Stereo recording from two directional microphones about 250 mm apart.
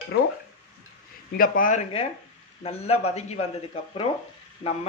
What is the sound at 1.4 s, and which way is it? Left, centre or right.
A man's voice, left.